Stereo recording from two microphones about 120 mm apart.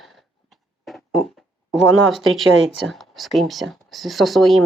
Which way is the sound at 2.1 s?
Centre (ahead or behind).